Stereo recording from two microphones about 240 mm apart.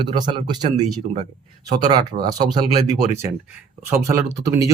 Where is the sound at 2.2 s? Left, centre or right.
Centre.